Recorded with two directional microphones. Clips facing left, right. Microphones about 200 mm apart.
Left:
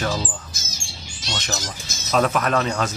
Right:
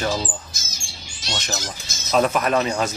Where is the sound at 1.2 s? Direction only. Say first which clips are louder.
Even; 5° right (ahead or behind).